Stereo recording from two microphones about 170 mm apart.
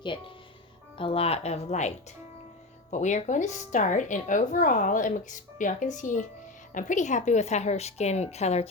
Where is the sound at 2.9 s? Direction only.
45° left (ahead or behind).